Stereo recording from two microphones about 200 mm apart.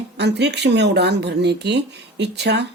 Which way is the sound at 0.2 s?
60° right (ahead or behind).